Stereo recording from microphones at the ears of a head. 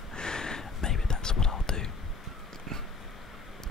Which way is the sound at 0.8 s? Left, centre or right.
Left.